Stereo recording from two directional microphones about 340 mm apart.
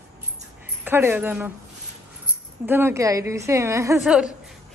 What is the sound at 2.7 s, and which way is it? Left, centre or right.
A woman's voice, centre.